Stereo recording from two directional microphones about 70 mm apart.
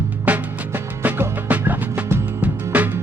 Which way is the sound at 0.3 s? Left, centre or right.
Right.